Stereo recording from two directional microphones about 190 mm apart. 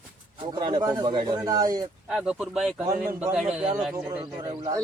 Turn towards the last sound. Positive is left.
turn(degrees=-20)  # may be behind; listen again after turning